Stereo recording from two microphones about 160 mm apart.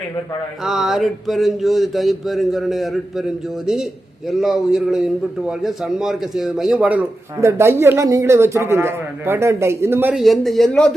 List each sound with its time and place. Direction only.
0.6 s a man's voice: centre (ahead or behind)
10.2 s a man's voice: centre (ahead or behind)